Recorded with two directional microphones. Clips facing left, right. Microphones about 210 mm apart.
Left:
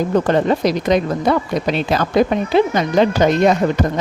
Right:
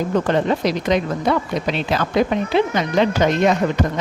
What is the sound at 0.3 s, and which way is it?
A woman's voice, 40° left (ahead or behind).